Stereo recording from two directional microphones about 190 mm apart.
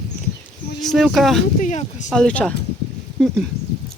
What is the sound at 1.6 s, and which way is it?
Speech, 40° left (ahead or behind).